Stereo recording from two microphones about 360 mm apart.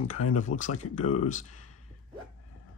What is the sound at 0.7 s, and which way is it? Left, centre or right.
Speech, left.